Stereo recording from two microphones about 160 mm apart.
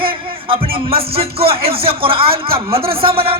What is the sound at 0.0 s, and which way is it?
Music, 35° right (ahead or behind).